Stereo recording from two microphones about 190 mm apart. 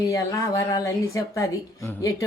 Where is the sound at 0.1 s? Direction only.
20° left (ahead or behind).